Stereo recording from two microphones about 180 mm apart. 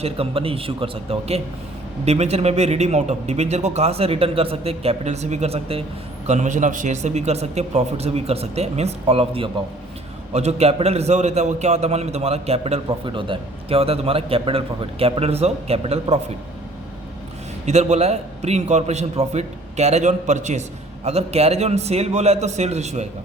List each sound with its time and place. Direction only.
0.0 s a man's voice: 30° right (ahead or behind)
17.7 s a man's voice: 40° right (ahead or behind)